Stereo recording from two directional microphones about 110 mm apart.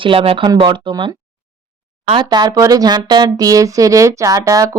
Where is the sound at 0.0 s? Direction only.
55° right (ahead or behind).